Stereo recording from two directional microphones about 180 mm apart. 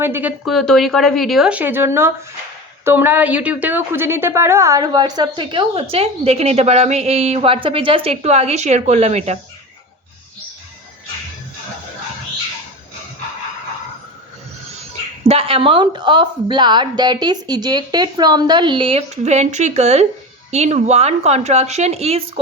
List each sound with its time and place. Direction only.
0.0 s a woman's voice: 10° right (ahead or behind)
0.5 s a woman's voice: centre (ahead or behind); by 9.4 s 40° right (ahead or behind)
15.3 s a woman's voice: 30° right (ahead or behind)